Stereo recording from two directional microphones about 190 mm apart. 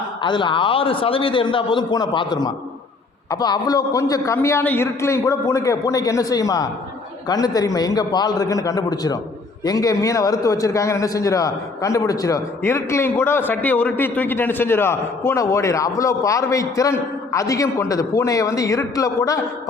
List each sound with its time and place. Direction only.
0.2 s a man's voice: 25° left (ahead or behind)